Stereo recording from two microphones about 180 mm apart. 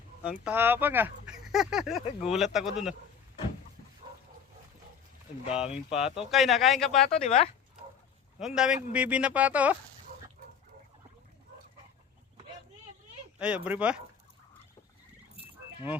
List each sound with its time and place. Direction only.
0.4 s speech: 10° right (ahead or behind)
5.5 s speech: 5° right (ahead or behind)
7.3 s speech: 35° left (ahead or behind)
8.4 s speech: 5° right (ahead or behind)
13.4 s speech: 5° right (ahead or behind)